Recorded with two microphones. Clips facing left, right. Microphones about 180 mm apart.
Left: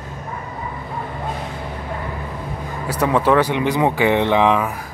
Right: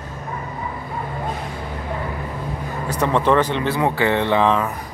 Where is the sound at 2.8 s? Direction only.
10° left (ahead or behind).